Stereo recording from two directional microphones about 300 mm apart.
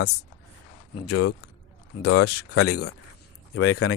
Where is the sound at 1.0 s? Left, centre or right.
Left.